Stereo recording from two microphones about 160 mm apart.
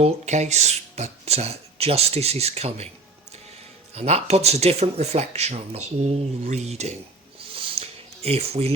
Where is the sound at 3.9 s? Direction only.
40° right (ahead or behind).